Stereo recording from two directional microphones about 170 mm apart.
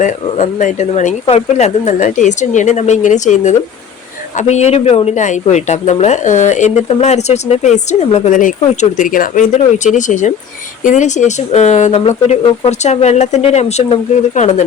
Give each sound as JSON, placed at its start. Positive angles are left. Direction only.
{"t": 0.0, "sound": "speech", "side_deg": 45}